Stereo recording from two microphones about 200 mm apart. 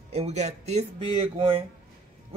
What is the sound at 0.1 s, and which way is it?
Speech, 35° right (ahead or behind).